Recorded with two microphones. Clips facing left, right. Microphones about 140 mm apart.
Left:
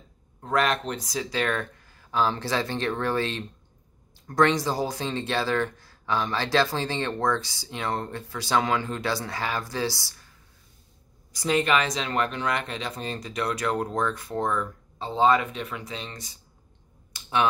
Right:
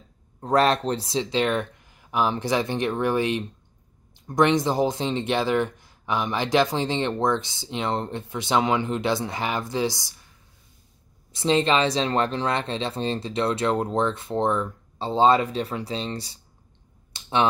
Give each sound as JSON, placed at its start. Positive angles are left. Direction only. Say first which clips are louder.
{"t": 0.4, "sound": "speech", "louder": "right 5 dB", "side_deg": -35}
{"t": 11.3, "sound": "speech", "louder": "right 3 dB", "side_deg": -25}